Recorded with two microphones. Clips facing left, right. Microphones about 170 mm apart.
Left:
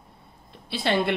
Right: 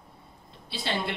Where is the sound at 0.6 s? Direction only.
60° left (ahead or behind).